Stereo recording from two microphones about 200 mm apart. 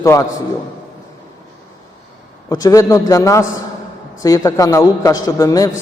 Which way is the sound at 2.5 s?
15° left (ahead or behind).